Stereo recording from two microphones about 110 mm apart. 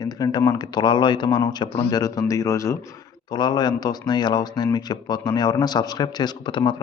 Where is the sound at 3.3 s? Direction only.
40° left (ahead or behind).